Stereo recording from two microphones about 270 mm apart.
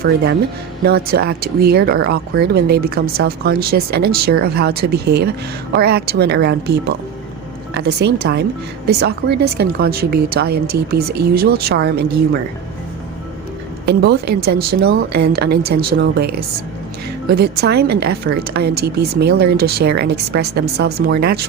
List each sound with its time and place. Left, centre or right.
0.9 s speech: right
13.8 s speech: right
17.3 s speech: right